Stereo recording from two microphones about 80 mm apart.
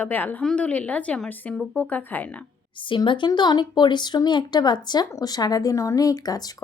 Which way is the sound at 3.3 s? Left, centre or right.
Left.